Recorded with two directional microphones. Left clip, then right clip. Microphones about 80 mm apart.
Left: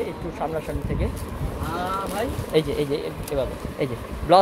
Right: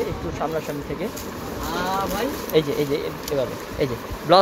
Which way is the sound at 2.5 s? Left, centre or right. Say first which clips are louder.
Right 1 dB; left.